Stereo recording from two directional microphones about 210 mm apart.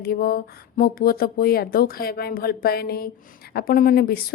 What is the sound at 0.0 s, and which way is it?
A woman's voice, 45° left (ahead or behind).